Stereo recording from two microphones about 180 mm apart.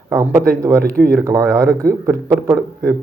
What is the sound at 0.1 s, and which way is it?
Speech, 15° right (ahead or behind).